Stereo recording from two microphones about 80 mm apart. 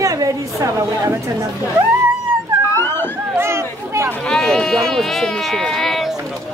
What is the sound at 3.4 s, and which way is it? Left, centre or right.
Chatter, right.